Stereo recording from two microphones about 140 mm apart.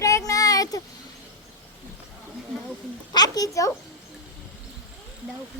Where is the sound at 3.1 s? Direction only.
25° left (ahead or behind).